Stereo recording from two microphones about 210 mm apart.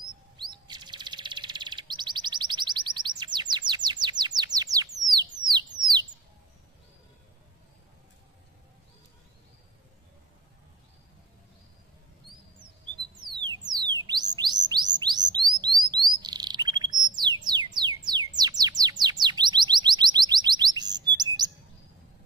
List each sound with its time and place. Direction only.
0.4 s chirp: 20° right (ahead or behind)
5.1 s a sound: 20° right (ahead or behind)
13.2 s music: 20° right (ahead or behind)
14.7 s bird: 20° right (ahead or behind)
15.6 s chirp: 20° right (ahead or behind)
17.7 s music: 20° right (ahead or behind)
18.3 s bird: 20° right (ahead or behind)